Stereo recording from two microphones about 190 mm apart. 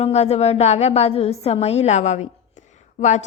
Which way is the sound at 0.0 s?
35° left (ahead or behind).